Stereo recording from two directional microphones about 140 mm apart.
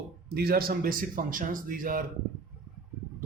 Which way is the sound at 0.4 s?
90° right.